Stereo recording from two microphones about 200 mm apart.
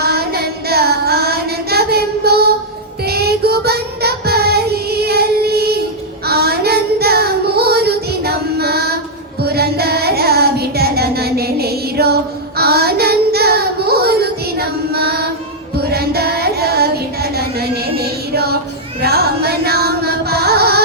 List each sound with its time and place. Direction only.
0.0 s child singing: 50° right (ahead or behind)
19.0 s carnatic music: 50° right (ahead or behind)